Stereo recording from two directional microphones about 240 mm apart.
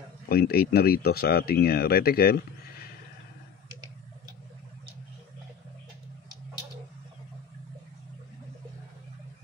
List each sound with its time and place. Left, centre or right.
0.3 s speech: left